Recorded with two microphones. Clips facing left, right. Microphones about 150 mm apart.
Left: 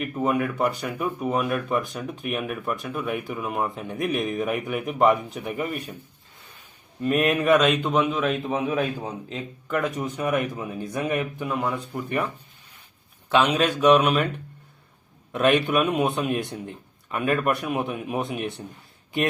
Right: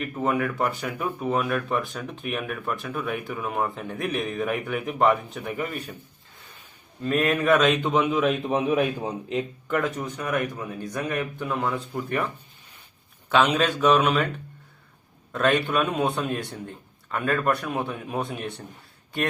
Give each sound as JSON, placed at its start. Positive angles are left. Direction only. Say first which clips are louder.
{"t": 0.0, "sound": "a man's voice", "louder": "left 1 dB", "side_deg": 10}
{"t": 7.0, "sound": "speech", "louder": "left 2 dB", "side_deg": 15}
{"t": 7.3, "sound": "a man's voice", "louder": "right 1 dB", "side_deg": 0}
{"t": 10.0, "sound": "speech", "louder": "left 2 dB", "side_deg": 20}
{"t": 11.3, "sound": "a man's voice", "louder": "even", "side_deg": 5}
{"t": 13.3, "sound": "speech", "louder": "even", "side_deg": 10}
{"t": 15.3, "sound": "speech", "louder": "left 2 dB", "side_deg": 15}